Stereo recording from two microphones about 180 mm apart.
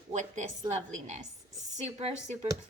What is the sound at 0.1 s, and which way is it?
A woman's voice, 45° right (ahead or behind).